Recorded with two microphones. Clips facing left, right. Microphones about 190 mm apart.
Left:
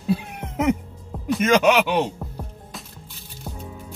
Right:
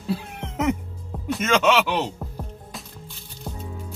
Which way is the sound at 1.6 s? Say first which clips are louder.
Left 2 dB; 15° left (ahead or behind).